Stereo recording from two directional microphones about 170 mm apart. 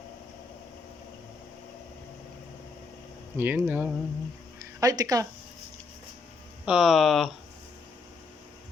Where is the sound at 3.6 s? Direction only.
10° right (ahead or behind).